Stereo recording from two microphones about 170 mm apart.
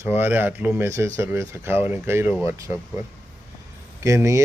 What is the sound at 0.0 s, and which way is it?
Speech, 10° right (ahead or behind).